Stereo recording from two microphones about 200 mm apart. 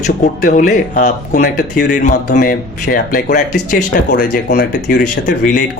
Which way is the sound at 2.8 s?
50° left (ahead or behind).